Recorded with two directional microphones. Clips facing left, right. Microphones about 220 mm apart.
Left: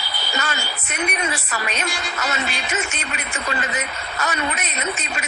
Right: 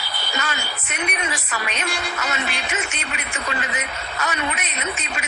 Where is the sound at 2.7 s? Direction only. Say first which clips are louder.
Left 2 dB; 45° left (ahead or behind).